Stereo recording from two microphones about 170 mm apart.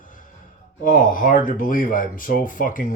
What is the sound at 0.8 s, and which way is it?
Speech, 55° left (ahead or behind).